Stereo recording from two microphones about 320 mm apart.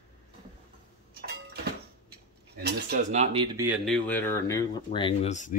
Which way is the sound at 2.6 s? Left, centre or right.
Right.